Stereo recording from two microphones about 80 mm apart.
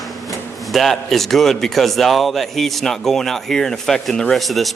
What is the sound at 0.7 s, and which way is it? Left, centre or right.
A man's voice, centre.